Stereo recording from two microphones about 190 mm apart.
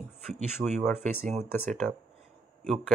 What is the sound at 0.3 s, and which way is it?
Speech, 35° right (ahead or behind).